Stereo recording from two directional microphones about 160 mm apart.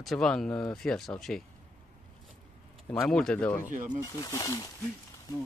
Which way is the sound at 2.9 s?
5° left (ahead or behind).